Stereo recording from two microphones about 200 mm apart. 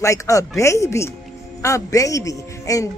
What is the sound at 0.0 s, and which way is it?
Speech, 15° left (ahead or behind).